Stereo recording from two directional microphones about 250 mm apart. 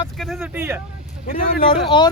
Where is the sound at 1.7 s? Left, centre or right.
Centre.